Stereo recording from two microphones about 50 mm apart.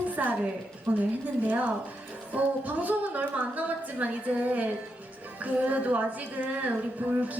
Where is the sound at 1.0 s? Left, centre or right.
Right.